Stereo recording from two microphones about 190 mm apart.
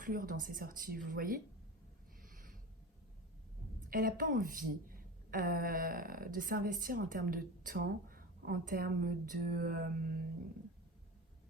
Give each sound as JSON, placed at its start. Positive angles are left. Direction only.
{"t": 0.0, "sound": "a woman's voice", "side_deg": -45}
{"t": 2.2, "sound": "a sound", "side_deg": -45}
{"t": 3.8, "sound": "a woman's voice", "side_deg": -50}